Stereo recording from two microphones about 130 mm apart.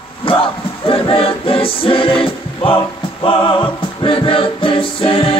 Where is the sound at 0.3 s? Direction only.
45° left (ahead or behind).